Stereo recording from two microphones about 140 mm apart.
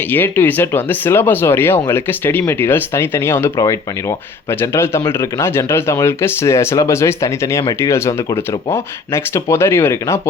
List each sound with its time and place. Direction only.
0.1 s speech: 15° left (ahead or behind)